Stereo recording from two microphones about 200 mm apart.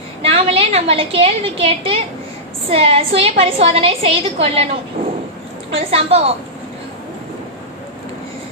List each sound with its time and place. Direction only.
0.2 s a woman's voice: 30° right (ahead or behind)
5.7 s a woman's voice: 30° right (ahead or behind)